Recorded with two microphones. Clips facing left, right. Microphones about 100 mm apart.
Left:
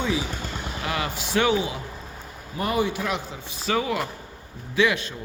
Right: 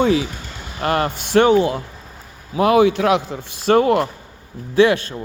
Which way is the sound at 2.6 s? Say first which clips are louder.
Right 11 dB; 90° right.